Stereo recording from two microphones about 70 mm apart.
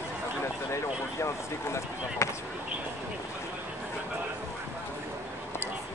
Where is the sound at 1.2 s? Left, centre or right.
Left.